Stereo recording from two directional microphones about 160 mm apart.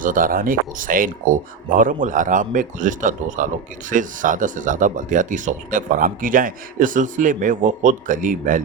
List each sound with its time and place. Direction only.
0.0 s speech: 60° right (ahead or behind)